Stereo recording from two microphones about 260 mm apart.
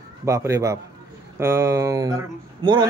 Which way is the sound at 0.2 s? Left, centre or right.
Centre.